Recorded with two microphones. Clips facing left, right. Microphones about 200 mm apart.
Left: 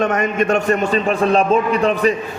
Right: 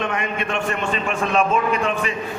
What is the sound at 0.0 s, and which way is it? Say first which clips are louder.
A man's voice: left 7 dB; 45° left (ahead or behind).